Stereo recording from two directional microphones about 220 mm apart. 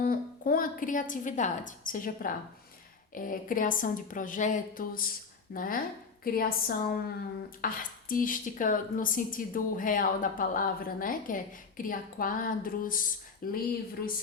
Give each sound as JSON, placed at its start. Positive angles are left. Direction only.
{"t": 0.0, "sound": "a woman's voice", "side_deg": 40}